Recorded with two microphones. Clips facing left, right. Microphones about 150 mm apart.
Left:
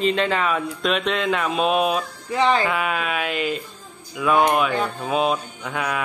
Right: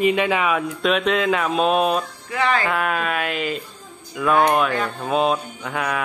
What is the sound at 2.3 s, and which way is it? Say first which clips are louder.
Speech: left 2 dB; 25° left (ahead or behind).